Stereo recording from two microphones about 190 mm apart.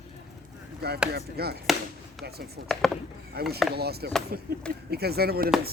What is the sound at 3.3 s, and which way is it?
Speech, 55° right (ahead or behind).